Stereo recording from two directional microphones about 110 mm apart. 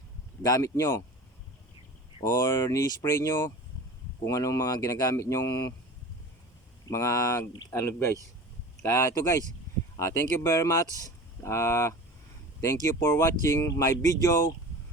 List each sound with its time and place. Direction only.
0.4 s speech: 30° left (ahead or behind)
2.2 s speech: 25° left (ahead or behind)
6.8 s speech: 30° left (ahead or behind)
13.0 s speech: 25° left (ahead or behind)